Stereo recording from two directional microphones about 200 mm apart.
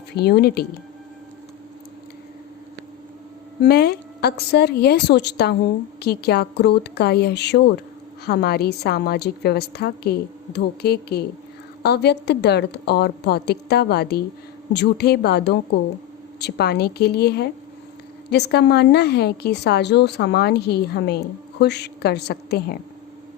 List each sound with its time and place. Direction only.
0.1 s a woman's voice: 55° left (ahead or behind)
3.6 s a woman's voice: 50° left (ahead or behind)